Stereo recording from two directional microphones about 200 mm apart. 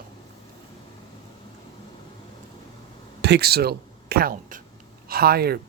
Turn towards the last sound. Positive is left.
turn(degrees=-50)  # may be behind; listen again after turning